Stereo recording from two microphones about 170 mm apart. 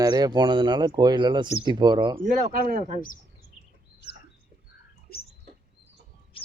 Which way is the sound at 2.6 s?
55° right (ahead or behind).